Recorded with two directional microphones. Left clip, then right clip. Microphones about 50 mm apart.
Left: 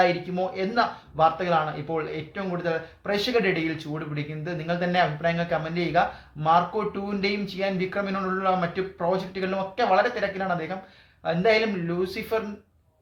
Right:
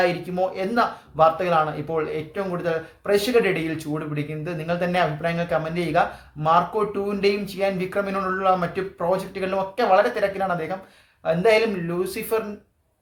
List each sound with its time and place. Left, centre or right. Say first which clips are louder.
0.0 s a man's voice: right 1 dB; right